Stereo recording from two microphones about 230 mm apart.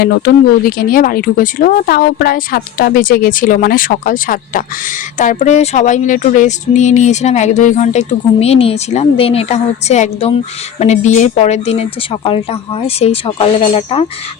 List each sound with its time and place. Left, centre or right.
0.2 s speech: left